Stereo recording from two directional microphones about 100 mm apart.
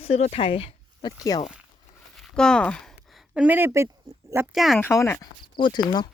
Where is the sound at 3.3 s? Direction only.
15° right (ahead or behind).